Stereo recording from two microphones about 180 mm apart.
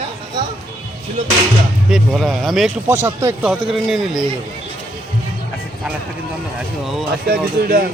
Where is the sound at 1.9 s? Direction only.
Centre (ahead or behind).